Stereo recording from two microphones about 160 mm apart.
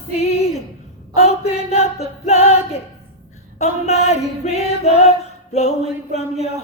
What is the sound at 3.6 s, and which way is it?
Music, 45° left (ahead or behind).